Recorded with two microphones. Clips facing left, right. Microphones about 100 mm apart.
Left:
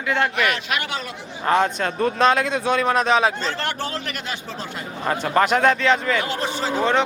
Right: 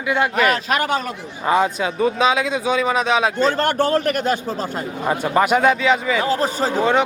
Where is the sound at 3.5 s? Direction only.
50° right (ahead or behind).